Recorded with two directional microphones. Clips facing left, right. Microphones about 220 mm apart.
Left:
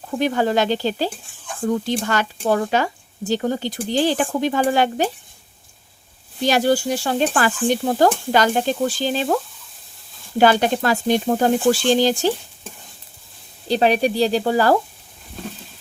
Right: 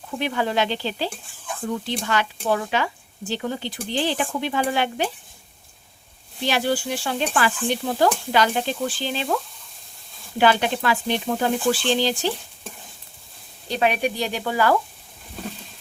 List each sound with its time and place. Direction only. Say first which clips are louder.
0.1 s speech: left 5 dB; 40° left (ahead or behind)
6.4 s speech: left 5 dB; 45° left (ahead or behind)
13.7 s speech: left 5 dB; 35° left (ahead or behind)